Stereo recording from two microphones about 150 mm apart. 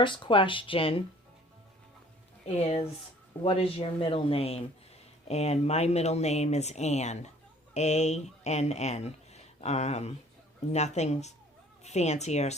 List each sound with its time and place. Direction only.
0.0 s speech: 35° left (ahead or behind)
2.6 s speech: 45° left (ahead or behind)